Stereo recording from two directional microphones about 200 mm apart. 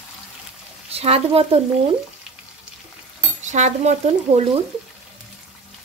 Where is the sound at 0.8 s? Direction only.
30° right (ahead or behind).